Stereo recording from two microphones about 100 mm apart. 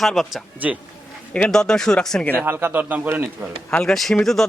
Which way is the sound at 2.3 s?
20° right (ahead or behind).